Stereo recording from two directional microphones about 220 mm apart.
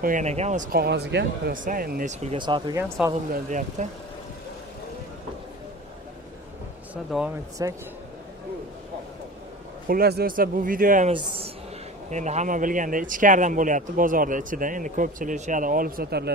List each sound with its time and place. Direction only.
0.0 s a man's voice: 35° right (ahead or behind)
2.3 s speech: 20° right (ahead or behind)
3.4 s a man's voice: 35° right (ahead or behind)
7.1 s speech: centre (ahead or behind)
7.6 s a man's voice: 15° right (ahead or behind)
9.8 s a man's voice: 45° right (ahead or behind)
11.1 s a woman's voice: 25° right (ahead or behind); by 16.3 s 45° right (ahead or behind)